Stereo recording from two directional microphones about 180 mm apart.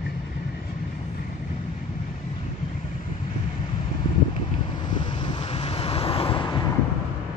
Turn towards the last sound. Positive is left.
turn(degrees=25)  # may be behind; listen again after turning